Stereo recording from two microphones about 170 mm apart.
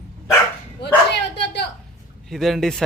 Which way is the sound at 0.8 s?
80° left.